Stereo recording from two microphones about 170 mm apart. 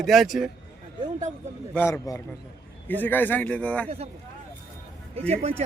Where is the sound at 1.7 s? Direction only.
15° left (ahead or behind).